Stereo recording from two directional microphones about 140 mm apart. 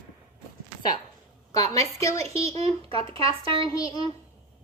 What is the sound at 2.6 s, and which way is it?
A child's voice, 40° right (ahead or behind).